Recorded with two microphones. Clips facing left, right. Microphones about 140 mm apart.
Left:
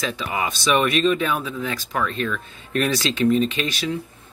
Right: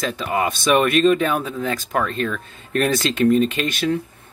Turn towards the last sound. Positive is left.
turn(degrees=-50)  # may be behind; listen again after turning